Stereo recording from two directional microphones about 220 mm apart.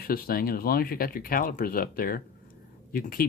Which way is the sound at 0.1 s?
40° left (ahead or behind).